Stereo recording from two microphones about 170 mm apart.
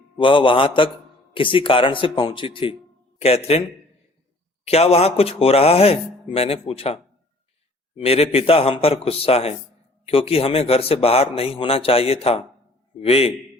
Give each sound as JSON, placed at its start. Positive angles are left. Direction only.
{"t": 0.2, "sound": "speech", "side_deg": 30}
{"t": 4.6, "sound": "speech", "side_deg": 40}